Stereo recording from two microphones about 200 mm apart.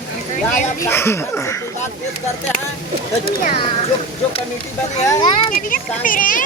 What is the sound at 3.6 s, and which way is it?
Speech, 30° left (ahead or behind).